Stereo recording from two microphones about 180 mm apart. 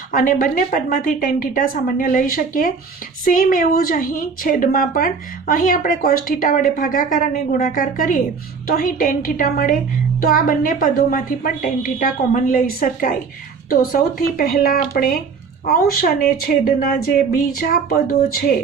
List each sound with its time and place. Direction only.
0.1 s a woman's voice: 50° left (ahead or behind)